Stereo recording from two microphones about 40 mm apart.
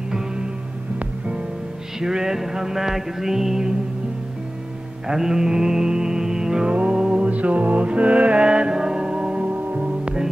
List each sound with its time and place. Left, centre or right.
0.9 s music: right
2.0 s music: centre
5.0 s mantra: centre
6.7 s music: right
8.5 s music: right
9.6 s music: right
10.0 s music: centre